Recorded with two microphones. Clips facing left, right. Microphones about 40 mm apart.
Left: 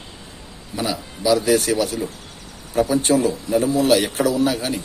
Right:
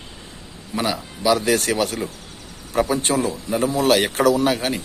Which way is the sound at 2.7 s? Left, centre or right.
Right.